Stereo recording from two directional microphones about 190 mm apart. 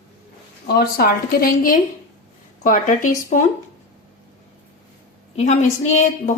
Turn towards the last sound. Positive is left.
turn(degrees=40)  # may be behind; listen again after turning